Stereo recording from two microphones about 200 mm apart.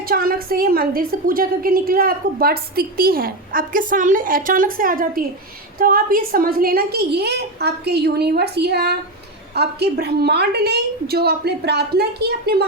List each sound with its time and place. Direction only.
0.0 s a woman's voice: 45° right (ahead or behind)